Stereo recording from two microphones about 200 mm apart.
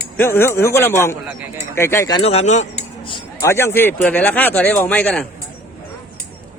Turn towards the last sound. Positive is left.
turn(degrees=5)  # may be behind; listen again after turning